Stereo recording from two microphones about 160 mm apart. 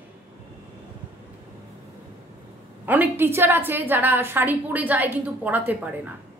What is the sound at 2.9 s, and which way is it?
A woman's voice, 10° right (ahead or behind).